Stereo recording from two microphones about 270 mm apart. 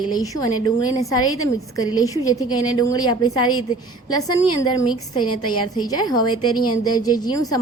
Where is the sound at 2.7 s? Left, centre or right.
Centre.